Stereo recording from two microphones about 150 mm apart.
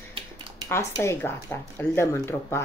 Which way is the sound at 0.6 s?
15° left (ahead or behind).